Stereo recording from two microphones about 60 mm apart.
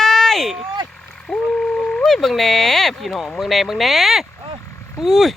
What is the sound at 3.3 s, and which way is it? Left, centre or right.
Speech, centre.